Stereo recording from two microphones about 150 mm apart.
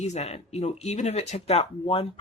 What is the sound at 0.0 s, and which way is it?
Speech, 50° left (ahead or behind).